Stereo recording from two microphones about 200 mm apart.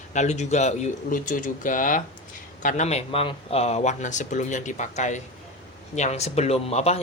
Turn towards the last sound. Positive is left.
turn(degrees=30)  # may be behind; listen again after turning